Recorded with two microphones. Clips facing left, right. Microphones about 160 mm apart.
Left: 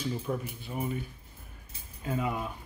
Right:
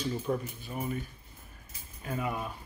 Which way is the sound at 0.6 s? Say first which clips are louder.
Left 3 dB; 15° left (ahead or behind).